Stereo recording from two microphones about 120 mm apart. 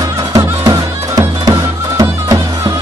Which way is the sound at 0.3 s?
30° right (ahead or behind).